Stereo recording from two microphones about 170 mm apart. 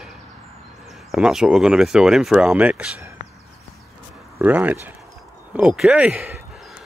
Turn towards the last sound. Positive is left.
turn(degrees=-10)  # may be behind; listen again after turning